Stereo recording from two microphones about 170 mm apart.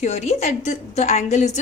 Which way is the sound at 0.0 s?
40° left (ahead or behind).